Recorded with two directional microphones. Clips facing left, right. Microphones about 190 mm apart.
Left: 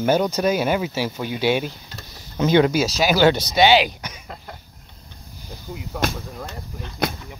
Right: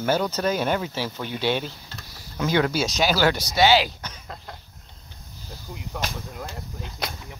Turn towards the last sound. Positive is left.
turn(degrees=55)  # may be behind; listen again after turning